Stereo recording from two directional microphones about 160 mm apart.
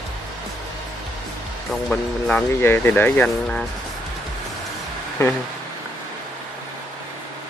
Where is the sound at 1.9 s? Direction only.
10° left (ahead or behind).